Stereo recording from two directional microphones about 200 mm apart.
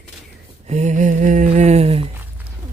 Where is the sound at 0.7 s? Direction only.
35° right (ahead or behind).